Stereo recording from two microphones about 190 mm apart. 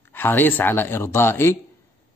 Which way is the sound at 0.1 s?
10° left (ahead or behind).